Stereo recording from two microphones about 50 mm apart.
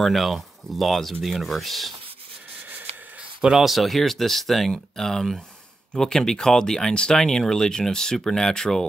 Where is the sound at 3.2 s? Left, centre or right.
Centre.